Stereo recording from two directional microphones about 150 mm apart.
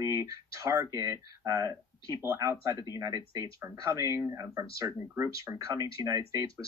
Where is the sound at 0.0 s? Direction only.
20° right (ahead or behind).